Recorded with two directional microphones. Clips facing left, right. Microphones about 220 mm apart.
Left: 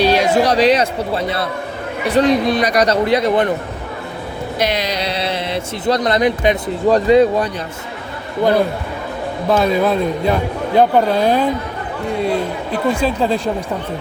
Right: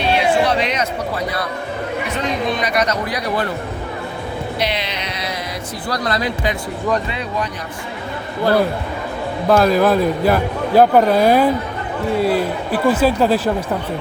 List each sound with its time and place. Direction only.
0.0 s speech: 40° left (ahead or behind); by 3.5 s 20° left (ahead or behind)
4.6 s speech: 45° left (ahead or behind)
9.5 s a man's voice: centre (ahead or behind)